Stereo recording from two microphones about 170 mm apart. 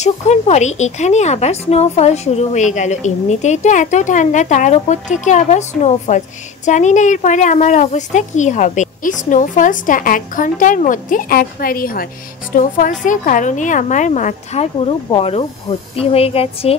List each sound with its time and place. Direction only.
0.0 s speech: 40° left (ahead or behind)